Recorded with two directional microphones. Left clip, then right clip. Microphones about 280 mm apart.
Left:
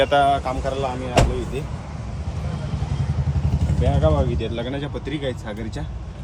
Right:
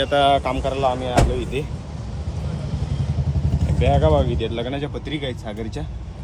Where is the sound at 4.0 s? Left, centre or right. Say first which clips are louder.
Even; centre.